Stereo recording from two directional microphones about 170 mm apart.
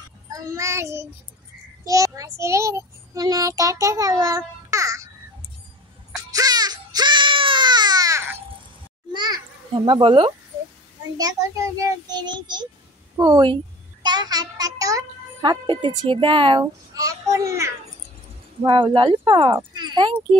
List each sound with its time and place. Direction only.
0.3 s child singing: 20° right (ahead or behind)
6.1 s baby cry: 20° right (ahead or behind)
9.1 s children playing: 25° right (ahead or behind)
9.8 s child singing: 30° right (ahead or behind)
14.0 s a child's voice: 25° right (ahead or behind)
18.6 s child singing: 30° right (ahead or behind)
19.5 s speech: 25° right (ahead or behind)